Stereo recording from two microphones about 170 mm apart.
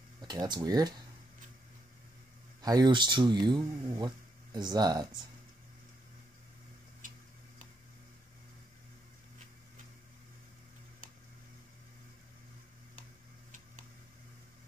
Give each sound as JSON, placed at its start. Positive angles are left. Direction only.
{"t": 0.2, "sound": "speech", "side_deg": -25}
{"t": 2.6, "sound": "speech", "side_deg": -25}